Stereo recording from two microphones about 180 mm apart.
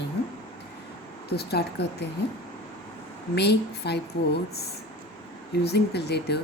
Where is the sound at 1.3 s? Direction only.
65° left (ahead or behind).